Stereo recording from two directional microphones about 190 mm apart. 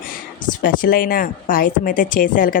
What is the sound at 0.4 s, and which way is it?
A woman's voice, 45° left (ahead or behind).